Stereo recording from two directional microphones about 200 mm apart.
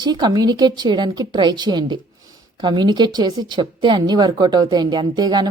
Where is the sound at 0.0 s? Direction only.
20° right (ahead or behind).